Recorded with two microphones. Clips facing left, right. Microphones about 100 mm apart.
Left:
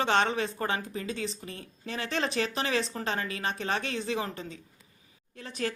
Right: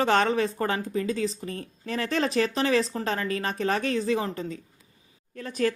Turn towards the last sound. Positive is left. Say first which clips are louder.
# right 7 dB
turn(degrees=-40)  # may be behind; listen again after turning